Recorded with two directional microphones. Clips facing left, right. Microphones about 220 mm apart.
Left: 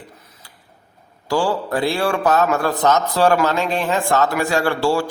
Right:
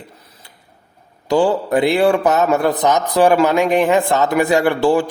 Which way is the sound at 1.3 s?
20° right (ahead or behind).